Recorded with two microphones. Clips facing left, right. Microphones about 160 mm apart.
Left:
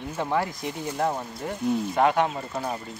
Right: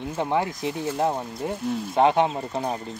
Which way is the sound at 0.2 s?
20° right (ahead or behind).